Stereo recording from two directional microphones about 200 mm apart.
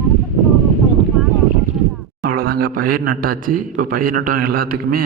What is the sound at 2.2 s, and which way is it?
A man's voice, 50° right (ahead or behind).